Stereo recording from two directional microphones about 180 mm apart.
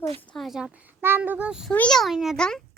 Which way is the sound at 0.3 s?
Centre (ahead or behind).